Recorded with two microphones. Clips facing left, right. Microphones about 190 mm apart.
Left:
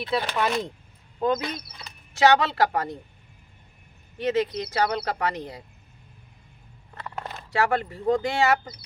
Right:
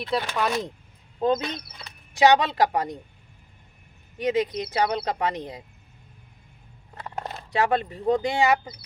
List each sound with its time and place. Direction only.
0.3 s speech: centre (ahead or behind)
1.2 s speech: 25° right (ahead or behind)
2.1 s speech: 15° right (ahead or behind)
4.2 s speech: 15° right (ahead or behind)
6.9 s speech: 20° right (ahead or behind)